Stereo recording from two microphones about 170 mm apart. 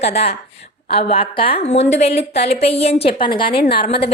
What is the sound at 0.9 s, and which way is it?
Speech, 35° left (ahead or behind).